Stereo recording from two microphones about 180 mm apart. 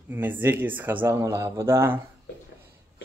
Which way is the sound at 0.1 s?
10° right (ahead or behind).